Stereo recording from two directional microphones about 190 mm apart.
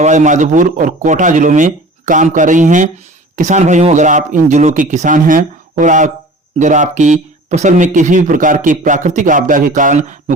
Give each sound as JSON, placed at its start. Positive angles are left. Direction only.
{"t": 0.0, "sound": "a man's voice", "side_deg": -40}